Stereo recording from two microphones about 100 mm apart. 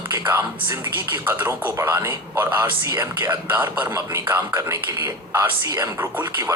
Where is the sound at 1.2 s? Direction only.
25° right (ahead or behind).